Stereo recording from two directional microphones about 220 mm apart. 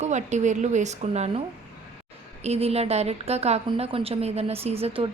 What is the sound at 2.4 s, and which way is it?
A woman's voice, 30° right (ahead or behind).